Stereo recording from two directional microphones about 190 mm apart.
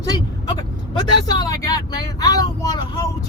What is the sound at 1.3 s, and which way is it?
Speech, 20° left (ahead or behind).